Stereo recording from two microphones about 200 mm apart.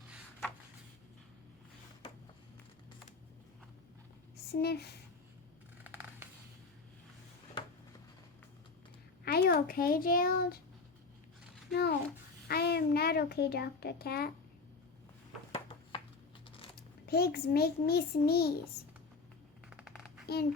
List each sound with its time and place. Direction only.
4.6 s a child's voice: 55° left (ahead or behind)
5.8 s scissors: 10° right (ahead or behind)
9.2 s speech: 50° left (ahead or behind)
11.7 s a child's voice: 50° left (ahead or behind)
17.1 s a child's voice: 50° left (ahead or behind)
20.2 s a child's voice: 50° left (ahead or behind)